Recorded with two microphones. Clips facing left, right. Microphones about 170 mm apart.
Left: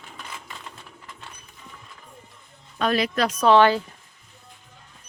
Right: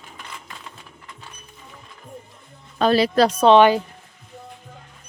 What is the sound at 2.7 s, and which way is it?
A woman's voice, 30° right (ahead or behind).